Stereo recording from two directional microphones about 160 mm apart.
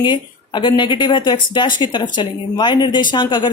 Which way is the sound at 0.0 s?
30° left (ahead or behind).